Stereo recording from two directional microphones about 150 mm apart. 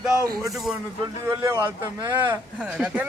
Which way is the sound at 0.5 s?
Centre (ahead or behind).